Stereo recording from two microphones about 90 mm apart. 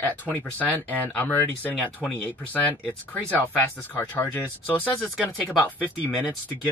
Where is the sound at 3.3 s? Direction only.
20° left (ahead or behind).